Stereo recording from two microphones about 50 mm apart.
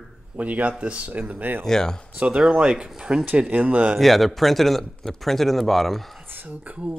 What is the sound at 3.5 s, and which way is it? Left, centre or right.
Speech, right.